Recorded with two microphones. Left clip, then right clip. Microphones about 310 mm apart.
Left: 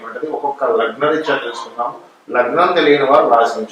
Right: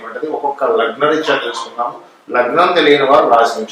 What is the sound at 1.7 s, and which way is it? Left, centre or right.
Speech, centre.